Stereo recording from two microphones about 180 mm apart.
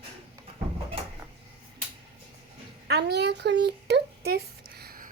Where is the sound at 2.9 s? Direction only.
65° right (ahead or behind).